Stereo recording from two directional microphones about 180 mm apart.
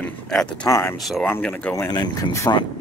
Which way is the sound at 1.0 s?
Centre (ahead or behind).